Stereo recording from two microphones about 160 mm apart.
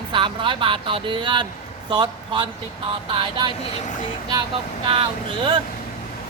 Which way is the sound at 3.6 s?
50° left (ahead or behind).